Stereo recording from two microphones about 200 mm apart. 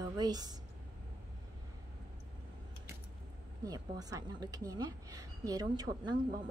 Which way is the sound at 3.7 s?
20° right (ahead or behind).